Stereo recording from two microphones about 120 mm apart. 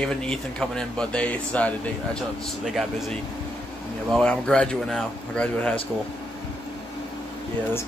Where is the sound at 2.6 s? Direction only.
Centre (ahead or behind).